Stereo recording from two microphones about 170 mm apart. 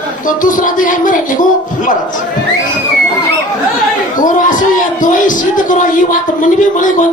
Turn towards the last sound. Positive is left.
turn(degrees=50)  # may be behind; listen again after turning